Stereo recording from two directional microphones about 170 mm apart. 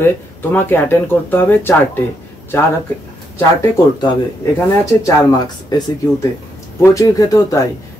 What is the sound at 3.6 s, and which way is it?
Speech, 25° left (ahead or behind).